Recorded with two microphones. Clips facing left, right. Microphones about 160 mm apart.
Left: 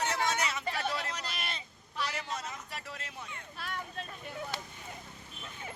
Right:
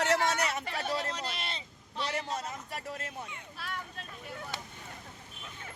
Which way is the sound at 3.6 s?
Centre (ahead or behind).